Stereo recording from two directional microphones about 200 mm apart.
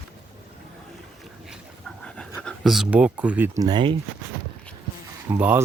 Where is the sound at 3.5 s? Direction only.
20° right (ahead or behind).